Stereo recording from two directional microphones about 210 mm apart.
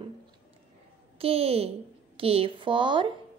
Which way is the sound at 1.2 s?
30° right (ahead or behind).